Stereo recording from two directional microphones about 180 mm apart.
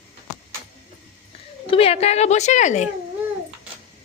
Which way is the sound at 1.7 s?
30° left (ahead or behind).